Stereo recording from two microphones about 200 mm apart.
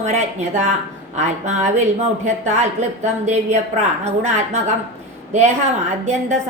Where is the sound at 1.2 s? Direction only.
35° right (ahead or behind).